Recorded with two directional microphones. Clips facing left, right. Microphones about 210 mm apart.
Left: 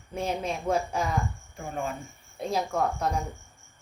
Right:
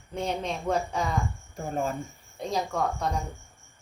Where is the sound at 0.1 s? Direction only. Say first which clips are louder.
Even; 5° left (ahead or behind).